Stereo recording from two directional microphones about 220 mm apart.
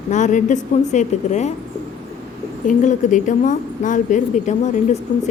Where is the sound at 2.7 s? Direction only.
35° left (ahead or behind).